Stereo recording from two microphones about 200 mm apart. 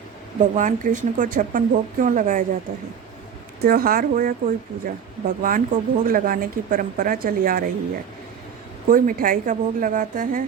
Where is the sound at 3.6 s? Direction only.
45° right (ahead or behind).